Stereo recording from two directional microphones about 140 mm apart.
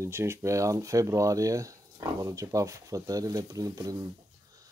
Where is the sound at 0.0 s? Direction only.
20° right (ahead or behind).